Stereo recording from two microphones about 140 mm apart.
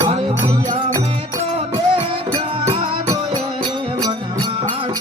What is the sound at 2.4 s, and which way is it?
Music, 40° right (ahead or behind).